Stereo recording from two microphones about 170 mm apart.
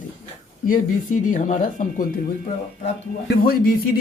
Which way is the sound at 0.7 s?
50° left (ahead or behind).